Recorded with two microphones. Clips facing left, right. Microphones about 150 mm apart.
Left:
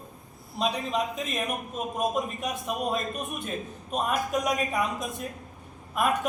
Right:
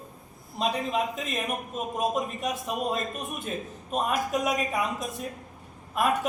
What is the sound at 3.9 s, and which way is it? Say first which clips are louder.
Speech: even; centre (ahead or behind).